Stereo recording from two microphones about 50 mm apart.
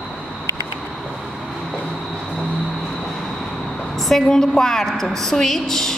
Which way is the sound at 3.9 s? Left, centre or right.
Centre.